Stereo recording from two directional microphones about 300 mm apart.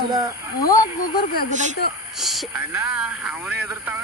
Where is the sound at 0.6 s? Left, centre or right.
Centre.